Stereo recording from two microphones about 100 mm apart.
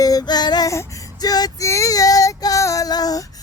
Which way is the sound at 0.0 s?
40° left (ahead or behind).